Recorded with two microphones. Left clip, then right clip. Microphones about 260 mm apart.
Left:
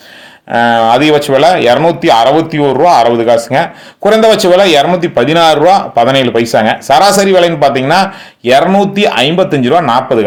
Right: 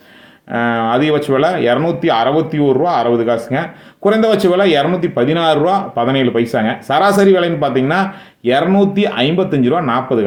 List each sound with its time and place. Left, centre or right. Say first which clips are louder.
0.5 s speech: left 8 dB; centre